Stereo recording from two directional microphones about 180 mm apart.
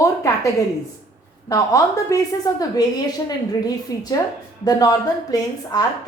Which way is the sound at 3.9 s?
20° left (ahead or behind).